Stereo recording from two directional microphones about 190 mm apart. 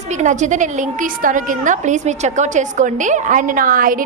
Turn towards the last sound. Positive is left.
turn(degrees=-45)  # may be behind; listen again after turning